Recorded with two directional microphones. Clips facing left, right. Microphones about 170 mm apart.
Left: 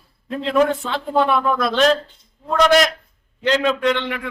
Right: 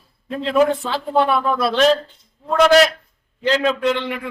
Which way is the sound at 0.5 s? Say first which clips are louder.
Right 1 dB; 5° right (ahead or behind).